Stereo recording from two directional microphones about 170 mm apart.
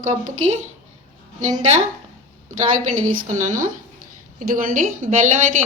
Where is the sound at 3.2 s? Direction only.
50° right (ahead or behind).